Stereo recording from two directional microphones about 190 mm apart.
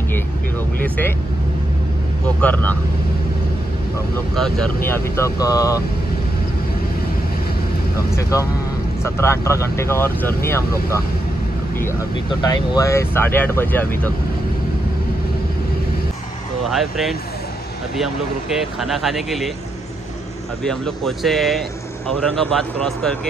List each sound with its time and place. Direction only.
0.7 s speech: 10° left (ahead or behind)
2.2 s speech: 10° left (ahead or behind)
4.8 s speech: 10° left (ahead or behind)
8.2 s speech: 15° left (ahead or behind)
12.4 s speech: 20° left (ahead or behind)
16.7 s speech: centre (ahead or behind)
18.8 s speech: centre (ahead or behind)
20.6 s speech: centre (ahead or behind)